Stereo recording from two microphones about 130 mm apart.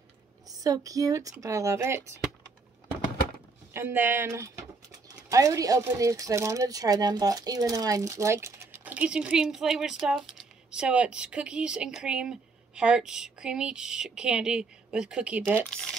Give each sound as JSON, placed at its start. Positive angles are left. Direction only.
{"t": 0.5, "sound": "speech", "side_deg": -25}
{"t": 3.7, "sound": "speech", "side_deg": -15}
{"t": 15.7, "sound": "a sound", "side_deg": 5}